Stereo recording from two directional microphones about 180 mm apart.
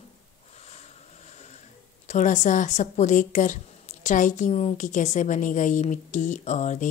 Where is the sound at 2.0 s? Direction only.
40° left (ahead or behind).